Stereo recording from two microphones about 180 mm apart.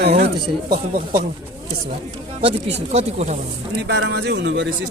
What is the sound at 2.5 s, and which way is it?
Speech, 35° right (ahead or behind).